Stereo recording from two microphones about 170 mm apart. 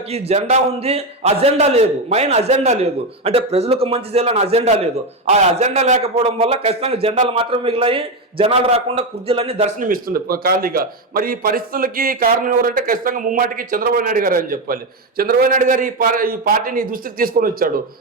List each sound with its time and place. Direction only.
0.1 s a man's voice: 40° right (ahead or behind); by 17.7 s 55° right (ahead or behind)